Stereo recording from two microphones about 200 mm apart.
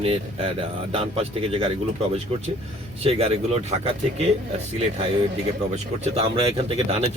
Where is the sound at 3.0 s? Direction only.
30° right (ahead or behind).